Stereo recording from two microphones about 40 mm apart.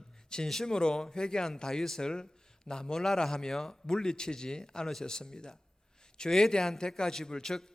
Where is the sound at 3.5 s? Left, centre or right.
Centre.